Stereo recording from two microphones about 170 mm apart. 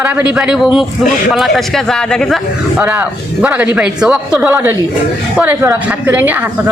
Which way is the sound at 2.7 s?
10° right (ahead or behind).